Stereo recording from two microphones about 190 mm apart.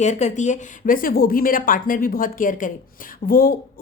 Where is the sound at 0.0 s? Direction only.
40° left (ahead or behind).